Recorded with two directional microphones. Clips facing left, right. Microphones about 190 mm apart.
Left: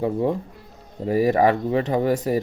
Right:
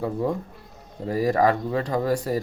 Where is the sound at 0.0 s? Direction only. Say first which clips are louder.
Left 3 dB; 20° left (ahead or behind).